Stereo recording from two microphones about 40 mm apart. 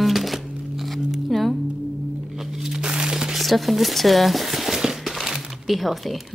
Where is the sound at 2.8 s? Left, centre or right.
Centre.